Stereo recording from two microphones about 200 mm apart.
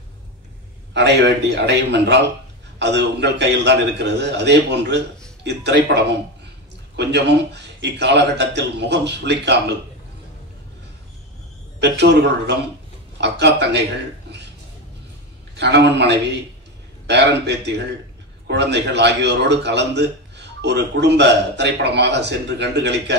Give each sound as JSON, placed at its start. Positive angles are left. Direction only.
{"t": 0.9, "sound": "a man's voice", "side_deg": -60}
{"t": 11.8, "sound": "a man's voice", "side_deg": -60}
{"t": 15.5, "sound": "a man's voice", "side_deg": -60}